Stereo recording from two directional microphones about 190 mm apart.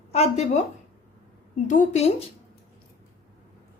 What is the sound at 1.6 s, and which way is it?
Speech, 40° left (ahead or behind).